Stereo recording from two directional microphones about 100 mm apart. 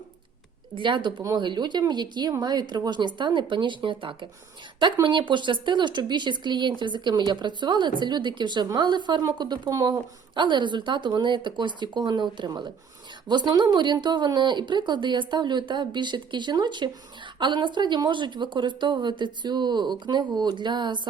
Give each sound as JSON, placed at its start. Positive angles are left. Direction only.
{"t": 0.7, "sound": "speech", "side_deg": -55}
{"t": 9.6, "sound": "speech", "side_deg": -35}
{"t": 10.3, "sound": "speech", "side_deg": -50}